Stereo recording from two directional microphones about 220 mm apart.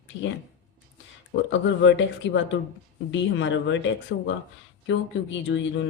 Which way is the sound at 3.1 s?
60° left (ahead or behind).